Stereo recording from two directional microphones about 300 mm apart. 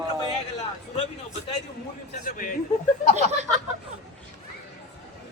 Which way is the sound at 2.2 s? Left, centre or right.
Left.